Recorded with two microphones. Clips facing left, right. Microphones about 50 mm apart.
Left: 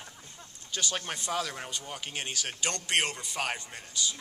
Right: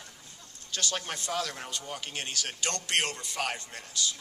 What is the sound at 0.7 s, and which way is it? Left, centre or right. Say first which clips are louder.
A man's voice: even; centre.